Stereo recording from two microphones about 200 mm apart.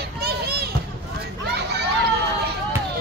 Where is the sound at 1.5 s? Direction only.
55° right (ahead or behind).